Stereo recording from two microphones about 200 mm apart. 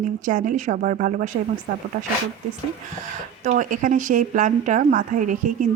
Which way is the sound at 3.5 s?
40° right (ahead or behind).